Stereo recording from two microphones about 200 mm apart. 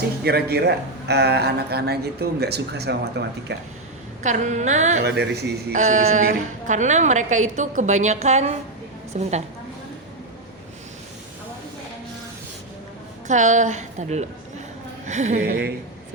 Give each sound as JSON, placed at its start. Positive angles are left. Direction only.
{"t": 0.3, "sound": "speech", "side_deg": -50}
{"t": 4.2, "sound": "a woman's voice", "side_deg": -35}
{"t": 5.0, "sound": "speech", "side_deg": -55}
{"t": 5.7, "sound": "a woman's voice", "side_deg": -35}
{"t": 13.2, "sound": "a woman's voice", "side_deg": -40}
{"t": 15.4, "sound": "a woman's voice", "side_deg": -55}